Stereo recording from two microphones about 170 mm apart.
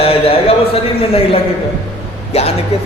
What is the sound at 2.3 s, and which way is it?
Speech, 40° left (ahead or behind).